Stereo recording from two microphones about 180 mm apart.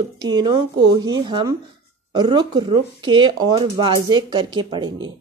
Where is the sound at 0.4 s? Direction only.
20° right (ahead or behind).